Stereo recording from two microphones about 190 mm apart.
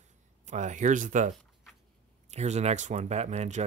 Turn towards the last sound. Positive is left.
turn(degrees=-35)  # may be behind; listen again after turning